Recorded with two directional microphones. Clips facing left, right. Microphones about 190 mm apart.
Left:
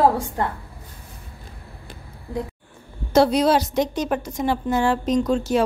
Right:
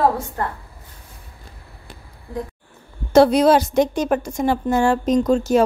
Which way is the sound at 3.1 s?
55° right (ahead or behind).